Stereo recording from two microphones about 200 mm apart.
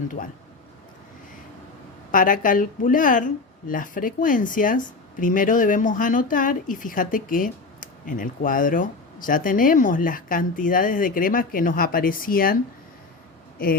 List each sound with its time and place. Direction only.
2.1 s speech: 40° left (ahead or behind)